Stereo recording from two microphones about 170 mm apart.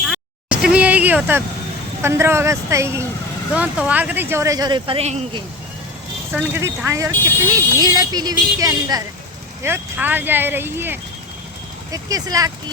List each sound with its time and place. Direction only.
0.0 s a sound: 5° right (ahead or behind)
2.0 s speech: 15° right (ahead or behind); by 5.2 s 40° right (ahead or behind)
6.6 s speech: 15° right (ahead or behind)